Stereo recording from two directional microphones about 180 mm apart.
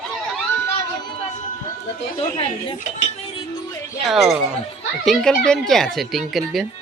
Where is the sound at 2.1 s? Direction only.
30° left (ahead or behind).